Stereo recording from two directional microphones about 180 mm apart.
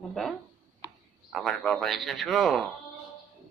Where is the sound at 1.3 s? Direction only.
Centre (ahead or behind).